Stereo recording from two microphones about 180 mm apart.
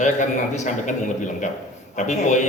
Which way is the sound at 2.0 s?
40° left (ahead or behind).